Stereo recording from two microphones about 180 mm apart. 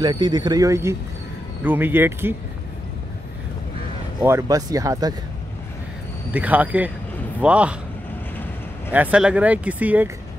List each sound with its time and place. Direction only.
0.0 s speech: 25° right (ahead or behind)
4.2 s speech: 15° right (ahead or behind)
6.3 s speech: 10° right (ahead or behind)
8.9 s speech: 10° right (ahead or behind)